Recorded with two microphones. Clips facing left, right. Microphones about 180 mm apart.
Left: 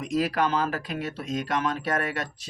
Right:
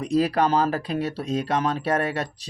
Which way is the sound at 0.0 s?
35° right (ahead or behind).